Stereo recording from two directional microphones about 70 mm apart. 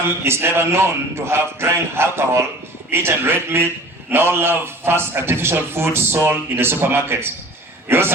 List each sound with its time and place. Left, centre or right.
0.3 s a man's voice: right